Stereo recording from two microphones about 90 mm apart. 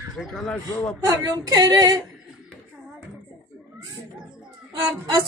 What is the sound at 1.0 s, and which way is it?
Speech, 45° right (ahead or behind).